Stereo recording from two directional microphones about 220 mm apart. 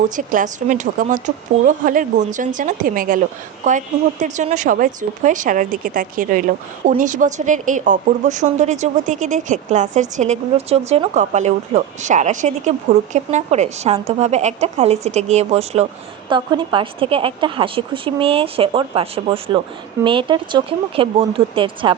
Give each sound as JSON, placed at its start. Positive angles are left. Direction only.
{"t": 0.2, "sound": "a woman's voice", "side_deg": -35}